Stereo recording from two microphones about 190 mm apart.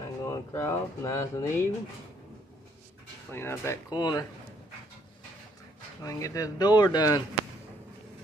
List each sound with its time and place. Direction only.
0.2 s speech: 15° left (ahead or behind)
3.3 s speech: 10° left (ahead or behind)
6.0 s speech: 15° left (ahead or behind)